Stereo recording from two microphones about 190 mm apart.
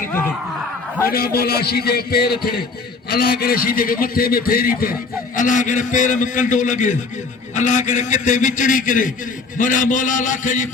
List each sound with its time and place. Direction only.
1.1 s a man's voice: 55° left (ahead or behind)